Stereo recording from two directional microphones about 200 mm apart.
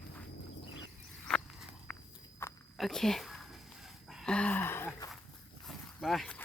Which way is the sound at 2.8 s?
Centre (ahead or behind).